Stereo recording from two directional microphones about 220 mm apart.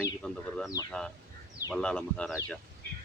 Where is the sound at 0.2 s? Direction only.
5° left (ahead or behind).